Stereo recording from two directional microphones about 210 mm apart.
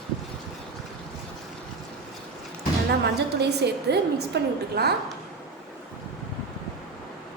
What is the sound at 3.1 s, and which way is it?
A woman's voice, 50° right (ahead or behind).